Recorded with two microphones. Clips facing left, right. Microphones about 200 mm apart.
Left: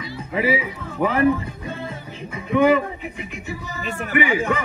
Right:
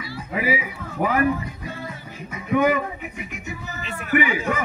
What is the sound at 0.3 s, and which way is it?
Speech, 30° left (ahead or behind).